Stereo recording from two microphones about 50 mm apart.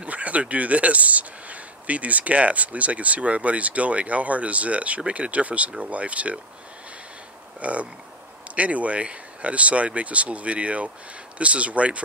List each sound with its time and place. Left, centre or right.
0.0 s speech: right
7.6 s speech: right